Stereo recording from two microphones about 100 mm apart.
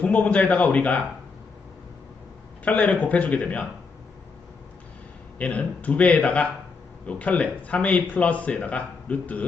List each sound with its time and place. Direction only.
0.0 s a man's voice: 15° left (ahead or behind)
2.6 s a man's voice: 10° left (ahead or behind)
5.4 s a man's voice: 15° left (ahead or behind)